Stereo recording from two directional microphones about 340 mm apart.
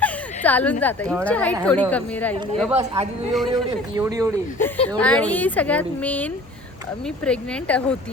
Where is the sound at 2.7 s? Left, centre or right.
Centre.